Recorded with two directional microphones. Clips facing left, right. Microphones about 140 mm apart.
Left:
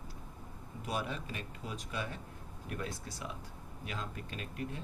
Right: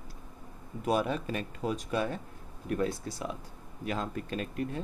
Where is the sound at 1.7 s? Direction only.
45° right (ahead or behind).